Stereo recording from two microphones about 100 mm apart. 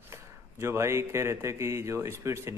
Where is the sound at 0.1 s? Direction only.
25° right (ahead or behind).